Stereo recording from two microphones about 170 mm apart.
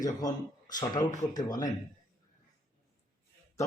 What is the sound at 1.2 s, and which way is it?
Speech, 50° left (ahead or behind).